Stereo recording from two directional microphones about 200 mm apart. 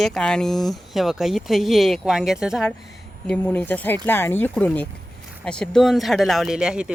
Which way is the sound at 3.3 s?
10° left (ahead or behind).